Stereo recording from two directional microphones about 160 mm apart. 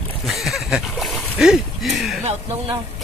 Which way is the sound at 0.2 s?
Centre (ahead or behind).